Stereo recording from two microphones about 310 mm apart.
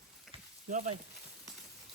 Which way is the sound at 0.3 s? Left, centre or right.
Right.